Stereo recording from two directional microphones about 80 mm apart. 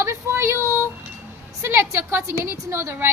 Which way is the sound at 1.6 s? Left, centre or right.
Right.